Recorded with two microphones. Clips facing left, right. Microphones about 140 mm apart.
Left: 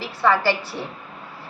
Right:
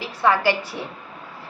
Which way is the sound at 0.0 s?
15° right (ahead or behind).